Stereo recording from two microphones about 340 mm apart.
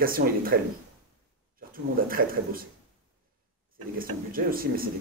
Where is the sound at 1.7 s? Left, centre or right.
Right.